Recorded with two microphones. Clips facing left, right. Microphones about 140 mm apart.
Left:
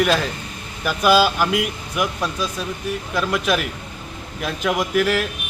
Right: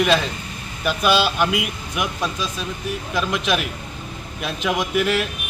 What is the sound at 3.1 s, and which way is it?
Speech, centre (ahead or behind).